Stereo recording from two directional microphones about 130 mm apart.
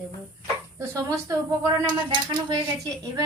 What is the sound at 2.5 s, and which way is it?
Speech, 30° right (ahead or behind).